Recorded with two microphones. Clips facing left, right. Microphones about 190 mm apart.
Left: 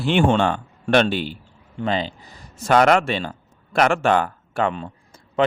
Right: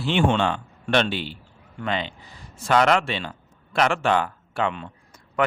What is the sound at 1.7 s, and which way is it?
Speech, 35° left (ahead or behind).